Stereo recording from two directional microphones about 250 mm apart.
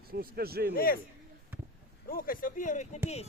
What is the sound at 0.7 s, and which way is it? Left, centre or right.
Speech, left.